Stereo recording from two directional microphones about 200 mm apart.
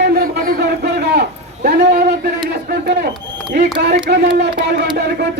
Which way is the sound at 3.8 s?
55° right (ahead or behind).